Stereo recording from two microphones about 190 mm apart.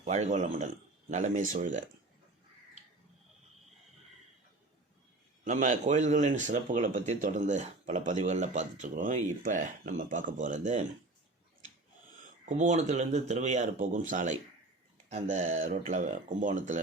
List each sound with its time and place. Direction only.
0.0 s speech: 35° right (ahead or behind)
5.5 s speech: 40° right (ahead or behind)
12.5 s speech: 40° right (ahead or behind)